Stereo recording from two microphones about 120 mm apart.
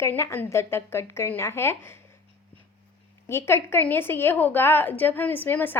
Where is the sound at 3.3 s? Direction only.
20° left (ahead or behind).